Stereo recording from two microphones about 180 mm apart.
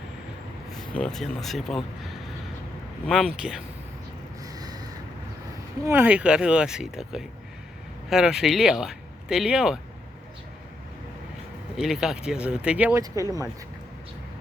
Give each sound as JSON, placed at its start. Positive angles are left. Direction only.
{"t": 0.9, "sound": "speech", "side_deg": 0}
{"t": 3.1, "sound": "speech", "side_deg": 0}
{"t": 4.5, "sound": "a sound", "side_deg": -20}
{"t": 5.8, "sound": "speech", "side_deg": -10}
{"t": 11.8, "sound": "speech", "side_deg": 0}